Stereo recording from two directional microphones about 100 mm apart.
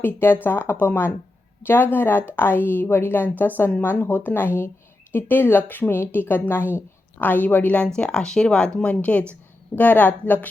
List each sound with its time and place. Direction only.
0.0 s a woman's voice: 25° left (ahead or behind)